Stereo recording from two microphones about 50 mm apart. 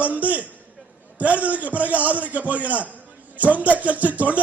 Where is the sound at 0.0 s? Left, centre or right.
Right.